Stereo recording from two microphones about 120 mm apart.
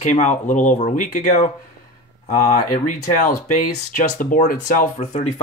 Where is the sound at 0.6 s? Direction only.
80° left.